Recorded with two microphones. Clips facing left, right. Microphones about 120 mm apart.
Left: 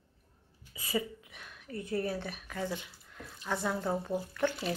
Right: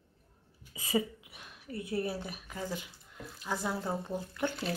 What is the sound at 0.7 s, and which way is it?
Speech, 20° right (ahead or behind).